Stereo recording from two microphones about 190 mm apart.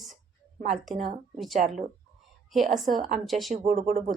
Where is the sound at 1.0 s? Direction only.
35° right (ahead or behind).